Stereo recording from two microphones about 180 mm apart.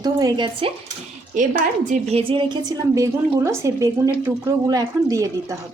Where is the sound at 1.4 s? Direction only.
45° right (ahead or behind).